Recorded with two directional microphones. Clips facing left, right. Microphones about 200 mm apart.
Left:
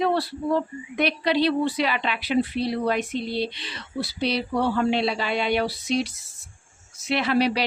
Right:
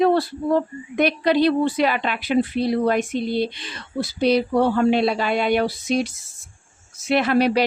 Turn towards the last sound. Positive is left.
turn(degrees=-50)  # may be behind; listen again after turning